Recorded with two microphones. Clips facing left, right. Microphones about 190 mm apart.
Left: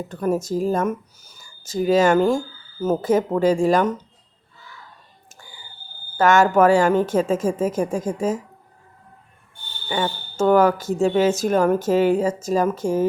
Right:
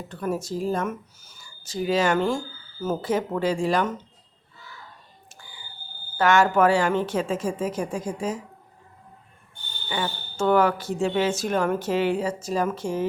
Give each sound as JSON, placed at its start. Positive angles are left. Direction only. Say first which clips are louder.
{"t": 0.1, "sound": "speech", "louder": "left 6 dB", "side_deg": 45}
{"t": 6.1, "sound": "speech", "louder": "left 4 dB", "side_deg": 45}
{"t": 9.9, "sound": "speech", "louder": "left 5 dB", "side_deg": 40}